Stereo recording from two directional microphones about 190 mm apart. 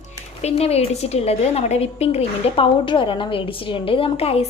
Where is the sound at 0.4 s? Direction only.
30° left (ahead or behind).